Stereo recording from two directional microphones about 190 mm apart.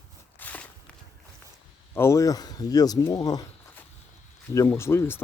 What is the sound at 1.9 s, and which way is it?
Speech, 15° left (ahead or behind).